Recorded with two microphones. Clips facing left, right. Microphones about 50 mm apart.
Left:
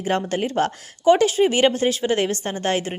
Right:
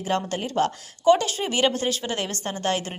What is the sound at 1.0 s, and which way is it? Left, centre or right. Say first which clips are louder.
Speech: left 4 dB; left.